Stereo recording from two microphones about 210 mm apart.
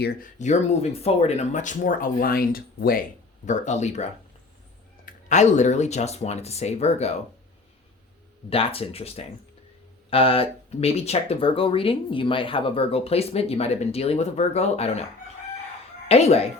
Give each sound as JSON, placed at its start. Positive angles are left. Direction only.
{"t": 0.0, "sound": "speech", "side_deg": 45}
{"t": 3.4, "sound": "speech", "side_deg": 35}
{"t": 5.3, "sound": "speech", "side_deg": 35}
{"t": 8.4, "sound": "speech", "side_deg": 25}
{"t": 16.0, "sound": "speech", "side_deg": 30}